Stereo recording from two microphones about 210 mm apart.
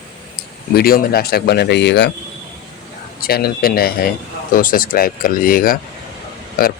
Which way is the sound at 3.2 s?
50° left (ahead or behind).